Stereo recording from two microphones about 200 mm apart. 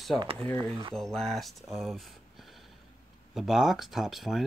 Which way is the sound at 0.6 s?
25° right (ahead or behind).